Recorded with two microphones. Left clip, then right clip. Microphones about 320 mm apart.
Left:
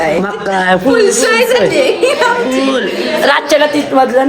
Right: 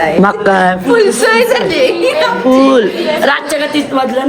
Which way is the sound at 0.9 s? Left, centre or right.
Centre.